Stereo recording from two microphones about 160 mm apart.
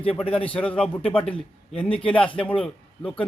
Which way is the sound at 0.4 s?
10° left (ahead or behind).